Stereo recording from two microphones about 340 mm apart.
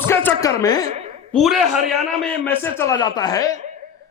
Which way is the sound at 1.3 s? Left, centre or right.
Centre.